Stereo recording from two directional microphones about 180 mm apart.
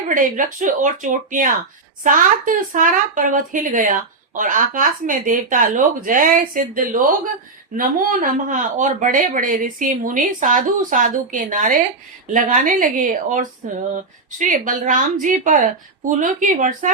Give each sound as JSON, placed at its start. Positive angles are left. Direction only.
{"t": 0.1, "sound": "speech", "side_deg": -45}